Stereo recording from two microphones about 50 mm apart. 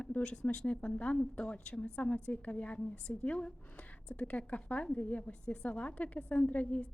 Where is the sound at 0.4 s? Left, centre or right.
Left.